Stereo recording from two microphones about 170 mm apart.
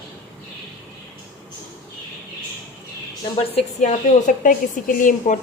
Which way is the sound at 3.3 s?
40° left (ahead or behind).